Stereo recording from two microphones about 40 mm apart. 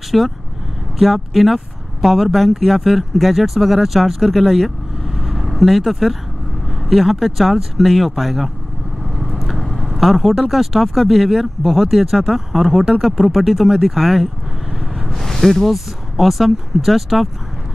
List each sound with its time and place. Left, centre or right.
0.1 s speech: centre
9.2 s vehicle: centre
10.5 s speech: centre